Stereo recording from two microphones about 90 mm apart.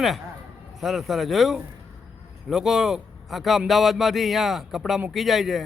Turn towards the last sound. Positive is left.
turn(degrees=0)  # may be behind; listen again after turning